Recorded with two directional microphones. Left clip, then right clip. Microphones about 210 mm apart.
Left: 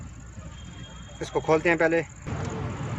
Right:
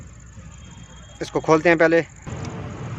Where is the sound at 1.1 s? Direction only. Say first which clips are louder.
Right 5 dB; 40° right (ahead or behind).